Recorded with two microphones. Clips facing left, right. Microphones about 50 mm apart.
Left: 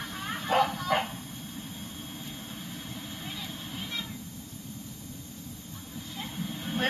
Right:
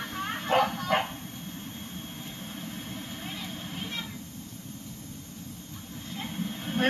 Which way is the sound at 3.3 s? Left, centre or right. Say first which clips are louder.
Right 1 dB; right.